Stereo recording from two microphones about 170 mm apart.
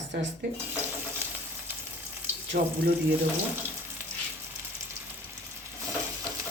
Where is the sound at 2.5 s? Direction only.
50° right (ahead or behind).